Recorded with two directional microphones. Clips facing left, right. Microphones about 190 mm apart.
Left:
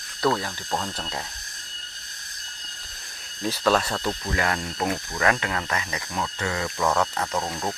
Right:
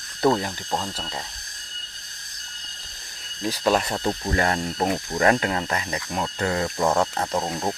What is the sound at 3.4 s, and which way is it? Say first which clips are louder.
Speech: right 1 dB; 15° right (ahead or behind).